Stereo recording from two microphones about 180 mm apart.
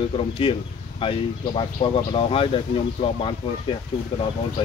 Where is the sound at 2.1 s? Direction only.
30° left (ahead or behind).